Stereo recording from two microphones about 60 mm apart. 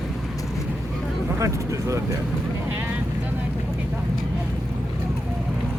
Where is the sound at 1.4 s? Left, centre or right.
Right.